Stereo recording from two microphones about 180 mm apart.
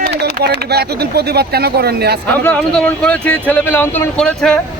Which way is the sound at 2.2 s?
10° left (ahead or behind).